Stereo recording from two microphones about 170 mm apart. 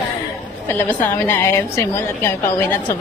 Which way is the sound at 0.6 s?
10° left (ahead or behind).